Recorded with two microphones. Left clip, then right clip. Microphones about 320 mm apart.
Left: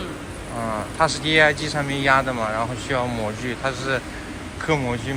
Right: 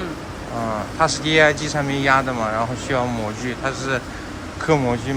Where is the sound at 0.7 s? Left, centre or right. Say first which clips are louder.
Right 1 dB; centre.